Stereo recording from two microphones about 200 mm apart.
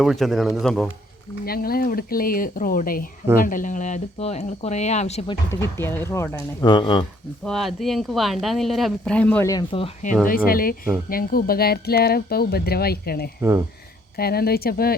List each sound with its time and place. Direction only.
0.0 s speech: centre (ahead or behind)
1.5 s speech: 50° left (ahead or behind); by 5.4 s 35° left (ahead or behind)
5.5 s speech: 15° left (ahead or behind)
7.4 s speech: centre (ahead or behind); by 9.9 s 25° left (ahead or behind)
10.2 s speech: 45° left (ahead or behind)